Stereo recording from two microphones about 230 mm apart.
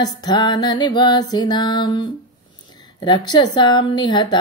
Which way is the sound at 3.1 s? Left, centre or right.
Centre.